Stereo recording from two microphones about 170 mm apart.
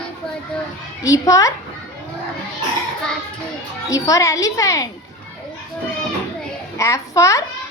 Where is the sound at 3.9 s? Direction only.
20° left (ahead or behind).